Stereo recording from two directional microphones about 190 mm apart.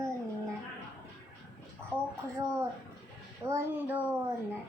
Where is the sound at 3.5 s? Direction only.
10° right (ahead or behind).